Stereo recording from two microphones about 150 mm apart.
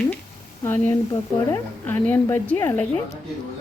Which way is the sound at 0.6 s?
15° left (ahead or behind).